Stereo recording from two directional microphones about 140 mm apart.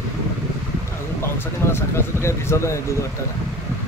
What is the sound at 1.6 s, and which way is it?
Speech, 20° left (ahead or behind).